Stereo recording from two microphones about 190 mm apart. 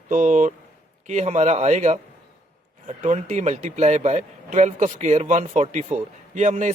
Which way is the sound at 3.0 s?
40° right (ahead or behind).